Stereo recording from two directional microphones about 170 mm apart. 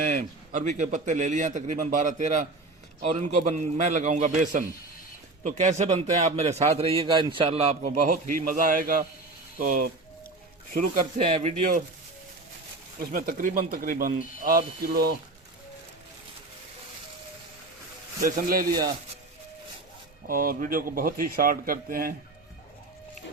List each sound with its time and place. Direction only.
0.0 s a man's voice: 50° right (ahead or behind)
8.1 s speech: 55° right (ahead or behind)
10.8 s a man's voice: 40° right (ahead or behind)
13.1 s speech: 55° right (ahead or behind)
18.2 s speech: 55° right (ahead or behind)
20.2 s speech: 55° right (ahead or behind)